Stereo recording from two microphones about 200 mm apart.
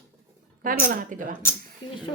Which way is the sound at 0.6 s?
45° right (ahead or behind).